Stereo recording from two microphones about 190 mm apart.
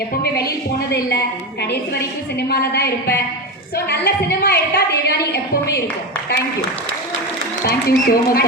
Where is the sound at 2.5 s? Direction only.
55° left (ahead or behind).